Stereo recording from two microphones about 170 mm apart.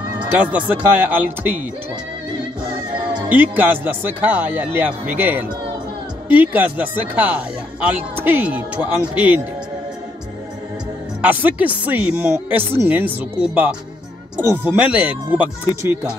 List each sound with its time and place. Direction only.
0.3 s speech: 10° right (ahead or behind)
3.3 s speech: 10° right (ahead or behind)
11.1 s speech: 10° right (ahead or behind)